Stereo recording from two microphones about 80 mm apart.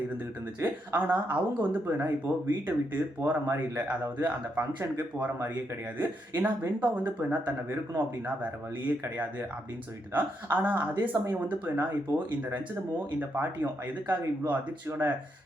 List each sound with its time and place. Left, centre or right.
0.6 s speech: right
10.1 s speech: right
13.1 s speech: right